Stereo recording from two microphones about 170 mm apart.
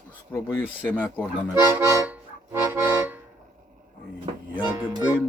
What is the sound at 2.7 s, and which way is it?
Speech, 15° right (ahead or behind).